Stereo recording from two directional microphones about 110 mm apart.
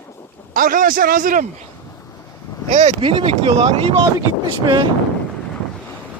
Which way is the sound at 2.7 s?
90° right.